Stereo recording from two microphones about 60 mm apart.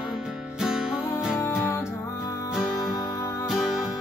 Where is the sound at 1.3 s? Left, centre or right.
Left.